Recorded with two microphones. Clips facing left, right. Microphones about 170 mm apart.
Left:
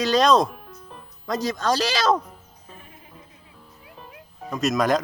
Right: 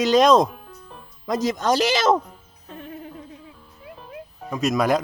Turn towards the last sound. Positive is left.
turn(degrees=-10)  # may be behind; listen again after turning